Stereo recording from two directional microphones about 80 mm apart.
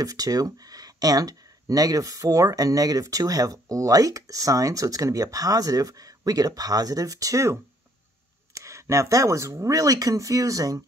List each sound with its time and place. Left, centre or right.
0.0 s speech: right
8.5 s speech: right